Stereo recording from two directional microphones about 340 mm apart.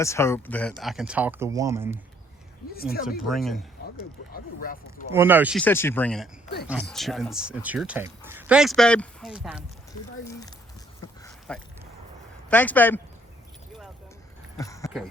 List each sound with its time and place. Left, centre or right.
0.0 s speech: centre
2.7 s speech: left
3.2 s speech: centre
4.3 s speech: left
5.1 s speech: centre
11.2 s a sound: centre
12.5 s speech: centre
14.6 s horse: centre